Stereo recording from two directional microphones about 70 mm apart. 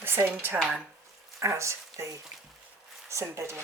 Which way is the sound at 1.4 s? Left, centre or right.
Right.